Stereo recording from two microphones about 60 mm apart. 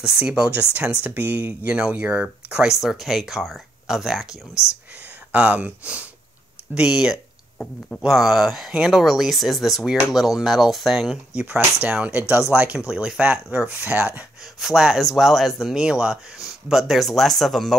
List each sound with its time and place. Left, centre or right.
0.2 s speech: right
2.5 s speech: centre
5.3 s speech: right; by 11.1 s centre
11.3 s speech: centre
13.7 s speech: right
14.6 s speech: centre
15.7 s speech: centre